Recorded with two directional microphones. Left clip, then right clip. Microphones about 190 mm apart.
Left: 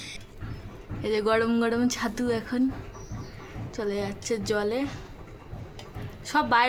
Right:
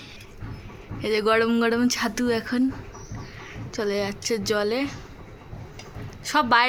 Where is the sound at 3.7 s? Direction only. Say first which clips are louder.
Right 4 dB; 10° right (ahead or behind).